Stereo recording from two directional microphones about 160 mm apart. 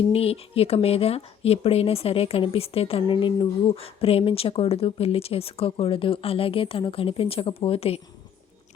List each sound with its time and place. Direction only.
0.1 s a woman's voice: 35° left (ahead or behind)